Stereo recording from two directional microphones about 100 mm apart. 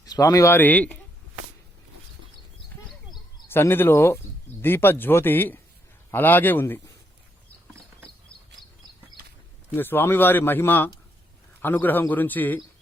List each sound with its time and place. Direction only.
0.0 s speech: 35° left (ahead or behind); by 0.9 s 15° left (ahead or behind)
3.5 s speech: 20° left (ahead or behind)
8.6 s a sound: centre (ahead or behind)
9.7 s speech: 20° left (ahead or behind)